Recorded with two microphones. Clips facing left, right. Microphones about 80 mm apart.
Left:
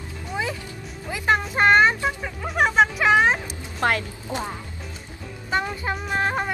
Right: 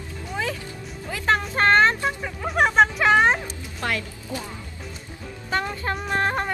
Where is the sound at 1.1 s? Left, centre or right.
Centre.